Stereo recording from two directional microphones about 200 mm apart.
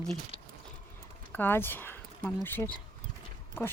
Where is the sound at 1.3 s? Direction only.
10° left (ahead or behind).